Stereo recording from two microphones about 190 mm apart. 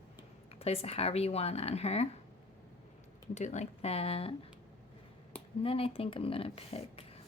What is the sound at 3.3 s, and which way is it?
A woman's voice, 40° left (ahead or behind).